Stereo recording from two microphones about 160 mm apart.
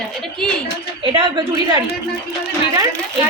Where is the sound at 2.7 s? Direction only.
25° right (ahead or behind).